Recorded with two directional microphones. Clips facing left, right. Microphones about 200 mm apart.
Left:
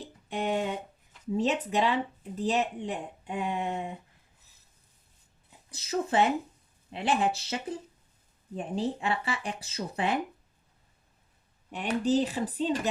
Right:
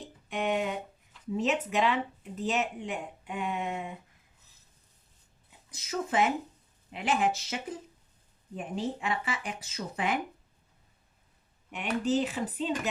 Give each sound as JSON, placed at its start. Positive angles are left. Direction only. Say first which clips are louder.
{"t": 0.3, "sound": "a sound", "louder": "even", "side_deg": 35}
{"t": 1.4, "sound": "speech", "louder": "left 1 dB", "side_deg": 35}
{"t": 5.7, "sound": "speech", "louder": "left 3 dB", "side_deg": 30}
{"t": 11.7, "sound": "speech", "louder": "left 2 dB", "side_deg": 35}